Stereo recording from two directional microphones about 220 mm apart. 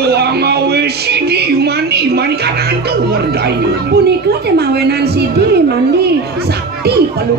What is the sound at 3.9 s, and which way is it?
Speech, 45° right (ahead or behind).